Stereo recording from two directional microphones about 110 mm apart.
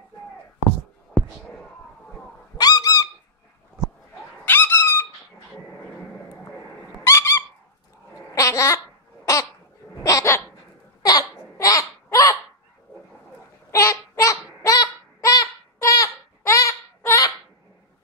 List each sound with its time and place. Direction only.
2.5 s a sound: 35° left (ahead or behind)
4.5 s squeak: 20° left (ahead or behind)
7.1 s owl: 25° left (ahead or behind)
8.4 s babbling: 30° left (ahead or behind)
10.0 s hiccup: 30° left (ahead or behind)
11.0 s laughter: 35° left (ahead or behind)
13.7 s a sound: 30° left (ahead or behind)